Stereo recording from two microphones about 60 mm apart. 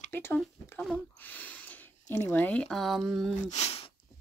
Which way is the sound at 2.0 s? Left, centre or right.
Left.